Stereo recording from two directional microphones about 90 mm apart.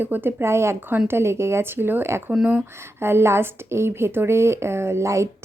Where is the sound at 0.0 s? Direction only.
25° right (ahead or behind).